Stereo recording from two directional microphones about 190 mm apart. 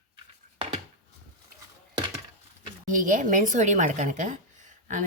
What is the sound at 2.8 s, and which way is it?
A woman's voice, 45° right (ahead or behind).